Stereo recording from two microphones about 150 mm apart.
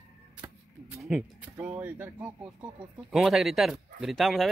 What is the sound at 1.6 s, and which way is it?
Speech, 15° right (ahead or behind).